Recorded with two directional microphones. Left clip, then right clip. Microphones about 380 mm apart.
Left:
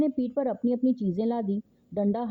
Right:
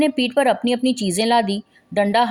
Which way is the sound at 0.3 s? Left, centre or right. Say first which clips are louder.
Right 12 dB; centre.